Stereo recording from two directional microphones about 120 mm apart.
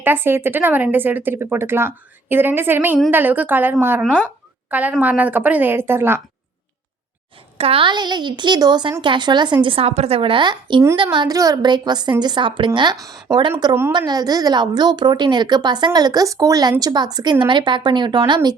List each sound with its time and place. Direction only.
0.0 s speech: 20° right (ahead or behind)
7.6 s a woman's voice: 50° right (ahead or behind)